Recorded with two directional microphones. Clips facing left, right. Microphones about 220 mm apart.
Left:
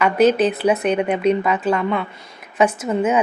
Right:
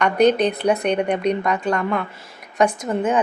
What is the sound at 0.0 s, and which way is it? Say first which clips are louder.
A woman's voice: left 1 dB; 5° left (ahead or behind).